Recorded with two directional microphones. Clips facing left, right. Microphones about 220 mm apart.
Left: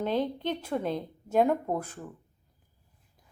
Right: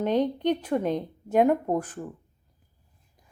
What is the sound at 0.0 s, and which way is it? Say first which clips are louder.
A woman's voice: right 5 dB; 15° right (ahead or behind).